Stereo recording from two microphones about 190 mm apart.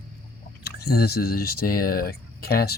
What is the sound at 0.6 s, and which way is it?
Speech, 55° left (ahead or behind).